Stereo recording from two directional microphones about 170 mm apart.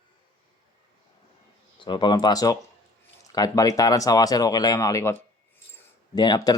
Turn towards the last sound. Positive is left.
turn(degrees=25)  # may be behind; listen again after turning